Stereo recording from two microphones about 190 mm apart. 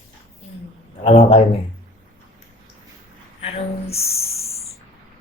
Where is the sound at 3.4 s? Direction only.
30° left (ahead or behind).